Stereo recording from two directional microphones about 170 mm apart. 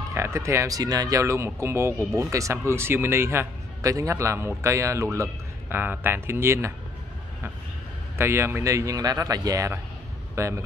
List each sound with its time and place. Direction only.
0.1 s speech: 15° right (ahead or behind)
8.2 s speech: 15° right (ahead or behind)